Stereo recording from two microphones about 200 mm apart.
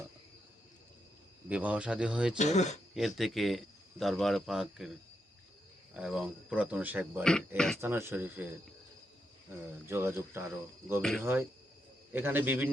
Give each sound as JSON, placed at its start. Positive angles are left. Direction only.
{"t": 1.5, "sound": "speech", "side_deg": -5}
{"t": 2.4, "sound": "speech", "side_deg": 35}
{"t": 2.9, "sound": "speech", "side_deg": 0}
{"t": 5.9, "sound": "speech", "side_deg": -5}
{"t": 7.3, "sound": "speech", "side_deg": 5}
{"t": 7.8, "sound": "speech", "side_deg": -10}
{"t": 9.9, "sound": "speech", "side_deg": -10}